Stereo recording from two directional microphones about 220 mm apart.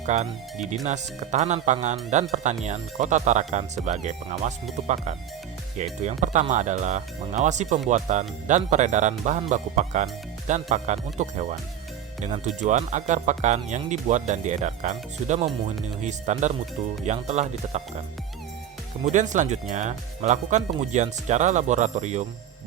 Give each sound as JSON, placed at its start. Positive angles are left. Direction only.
{"t": 0.0, "sound": "speech", "side_deg": -30}
{"t": 5.7, "sound": "speech", "side_deg": -30}
{"t": 19.0, "sound": "speech", "side_deg": -35}